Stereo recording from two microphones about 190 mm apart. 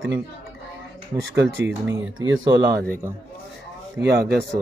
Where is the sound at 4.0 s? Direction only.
60° right (ahead or behind).